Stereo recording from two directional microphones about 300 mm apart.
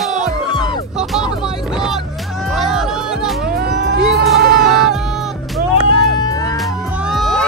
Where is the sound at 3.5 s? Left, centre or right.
Right.